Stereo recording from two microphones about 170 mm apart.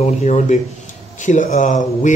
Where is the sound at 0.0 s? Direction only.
40° left (ahead or behind).